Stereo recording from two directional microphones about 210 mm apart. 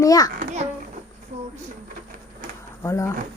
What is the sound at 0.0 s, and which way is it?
Speech, 15° left (ahead or behind).